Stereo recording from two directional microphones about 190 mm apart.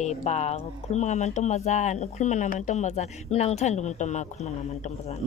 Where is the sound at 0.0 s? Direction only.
35° left (ahead or behind).